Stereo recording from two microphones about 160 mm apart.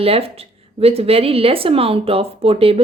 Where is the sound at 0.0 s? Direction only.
35° right (ahead or behind).